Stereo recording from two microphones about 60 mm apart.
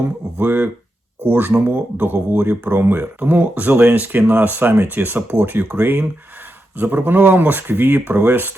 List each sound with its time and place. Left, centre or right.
0.3 s speech: right
3.0 s speech: right